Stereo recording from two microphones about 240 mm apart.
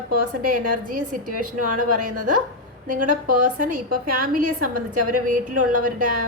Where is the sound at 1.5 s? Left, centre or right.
Right.